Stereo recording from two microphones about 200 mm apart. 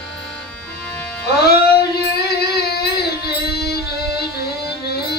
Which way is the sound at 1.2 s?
50° left (ahead or behind).